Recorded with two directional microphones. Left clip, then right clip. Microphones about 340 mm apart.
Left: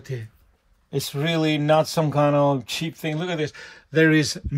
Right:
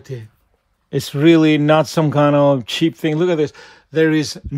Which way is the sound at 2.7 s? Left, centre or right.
Right.